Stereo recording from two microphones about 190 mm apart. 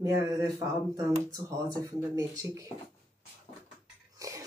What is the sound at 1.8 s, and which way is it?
Speech, 20° right (ahead or behind).